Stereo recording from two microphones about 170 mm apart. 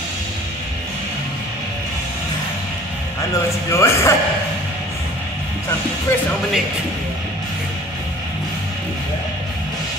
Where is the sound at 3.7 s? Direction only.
15° left (ahead or behind).